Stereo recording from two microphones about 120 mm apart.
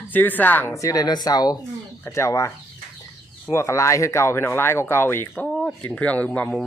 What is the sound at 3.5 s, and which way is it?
Speech, 25° left (ahead or behind).